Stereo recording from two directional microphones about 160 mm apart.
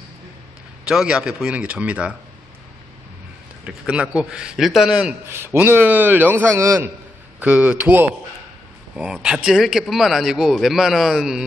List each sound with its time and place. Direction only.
0.8 s a man's voice: 5° right (ahead or behind)
3.6 s a man's voice: 5° right (ahead or behind)
7.3 s a man's voice: 10° right (ahead or behind)